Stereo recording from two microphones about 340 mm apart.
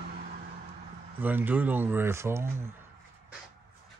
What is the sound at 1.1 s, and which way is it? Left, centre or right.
Speech, centre.